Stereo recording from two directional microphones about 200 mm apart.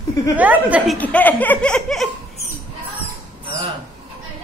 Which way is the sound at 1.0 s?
10° left (ahead or behind).